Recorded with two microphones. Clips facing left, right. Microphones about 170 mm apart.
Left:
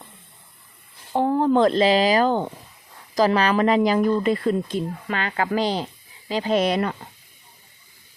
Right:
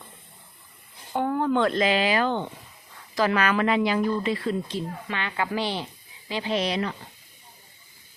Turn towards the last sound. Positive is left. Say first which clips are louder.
# left 5 dB
turn(degrees=50)  # may be behind; listen again after turning